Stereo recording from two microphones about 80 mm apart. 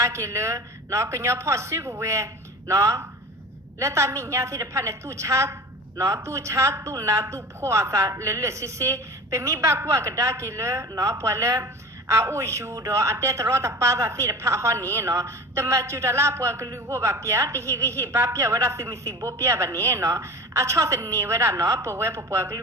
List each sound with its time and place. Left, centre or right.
0.0 s a woman's voice: right